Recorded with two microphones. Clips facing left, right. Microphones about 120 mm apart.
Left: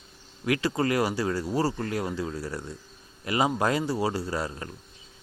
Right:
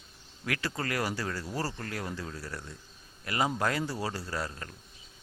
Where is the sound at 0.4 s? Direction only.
20° left (ahead or behind).